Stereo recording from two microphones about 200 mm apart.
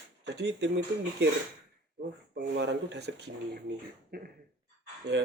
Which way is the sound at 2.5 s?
60° right (ahead or behind).